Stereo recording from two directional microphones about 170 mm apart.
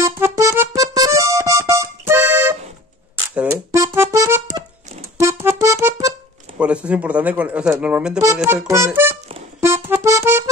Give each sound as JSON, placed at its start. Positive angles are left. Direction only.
{"t": 0.0, "sound": "music", "side_deg": -15}
{"t": 6.6, "sound": "speech", "side_deg": -5}
{"t": 9.6, "sound": "music", "side_deg": -15}